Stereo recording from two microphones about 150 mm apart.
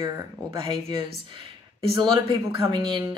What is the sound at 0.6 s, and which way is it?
A woman's voice, 30° right (ahead or behind).